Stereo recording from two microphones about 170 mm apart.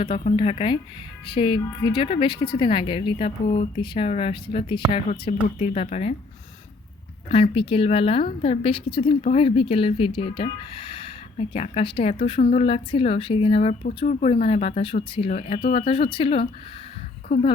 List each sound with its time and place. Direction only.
0.0 s a woman's voice: 30° left (ahead or behind)
7.5 s a woman's voice: 35° left (ahead or behind)